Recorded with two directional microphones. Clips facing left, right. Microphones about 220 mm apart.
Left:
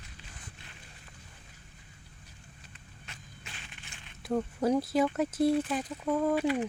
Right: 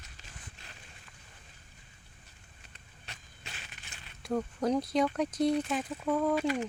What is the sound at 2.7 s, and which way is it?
Walk, 35° right (ahead or behind).